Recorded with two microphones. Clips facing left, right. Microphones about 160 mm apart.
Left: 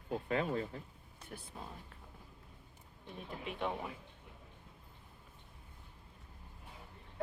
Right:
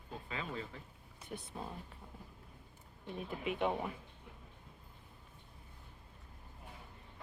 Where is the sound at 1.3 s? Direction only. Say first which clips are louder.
Right 4 dB; 5° right (ahead or behind).